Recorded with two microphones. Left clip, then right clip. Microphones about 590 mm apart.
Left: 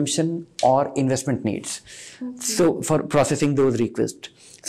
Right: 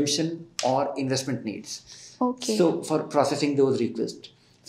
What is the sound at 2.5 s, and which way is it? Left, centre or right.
Speech, left.